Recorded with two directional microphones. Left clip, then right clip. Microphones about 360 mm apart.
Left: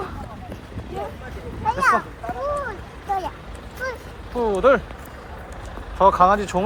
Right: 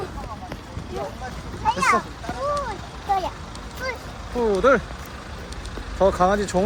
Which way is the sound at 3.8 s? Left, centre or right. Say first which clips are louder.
Left 1 dB; centre.